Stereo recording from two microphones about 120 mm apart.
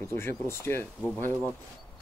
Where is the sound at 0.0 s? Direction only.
20° left (ahead or behind).